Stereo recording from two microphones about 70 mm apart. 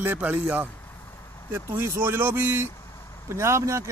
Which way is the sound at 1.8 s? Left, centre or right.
Right.